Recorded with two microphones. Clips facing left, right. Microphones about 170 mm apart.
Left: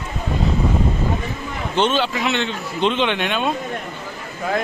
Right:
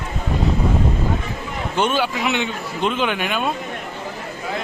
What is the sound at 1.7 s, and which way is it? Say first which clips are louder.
A man's voice: left 1 dB; 10° right (ahead or behind).